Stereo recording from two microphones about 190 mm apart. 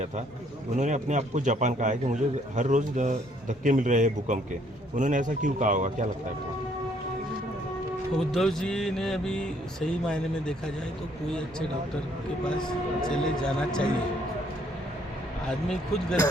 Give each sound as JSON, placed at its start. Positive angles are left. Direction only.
{"t": 0.8, "sound": "a man's voice", "side_deg": -40}
{"t": 8.2, "sound": "speech", "side_deg": 0}
{"t": 12.6, "sound": "speech", "side_deg": 5}
{"t": 15.4, "sound": "speech", "side_deg": 5}